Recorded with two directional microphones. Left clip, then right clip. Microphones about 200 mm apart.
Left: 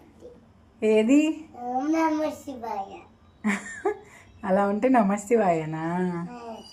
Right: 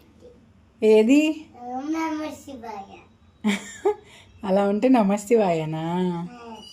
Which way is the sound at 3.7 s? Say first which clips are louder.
Right 4 dB; 40° right (ahead or behind).